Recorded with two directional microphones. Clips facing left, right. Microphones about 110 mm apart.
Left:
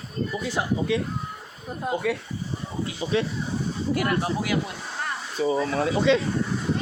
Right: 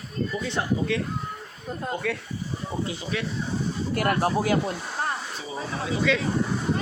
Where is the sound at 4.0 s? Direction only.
45° right (ahead or behind).